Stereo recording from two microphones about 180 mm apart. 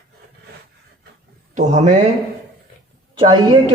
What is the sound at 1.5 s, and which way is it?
Speech, 40° right (ahead or behind).